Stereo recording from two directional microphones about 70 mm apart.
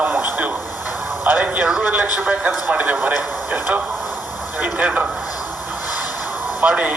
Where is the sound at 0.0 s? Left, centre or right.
Right.